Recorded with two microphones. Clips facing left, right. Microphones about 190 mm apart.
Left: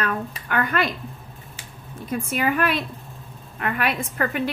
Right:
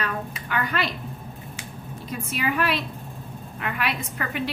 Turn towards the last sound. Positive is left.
turn(degrees=50)  # may be behind; listen again after turning